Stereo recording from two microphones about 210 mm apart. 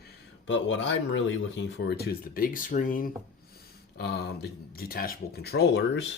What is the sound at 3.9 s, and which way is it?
Speech, 50° left (ahead or behind).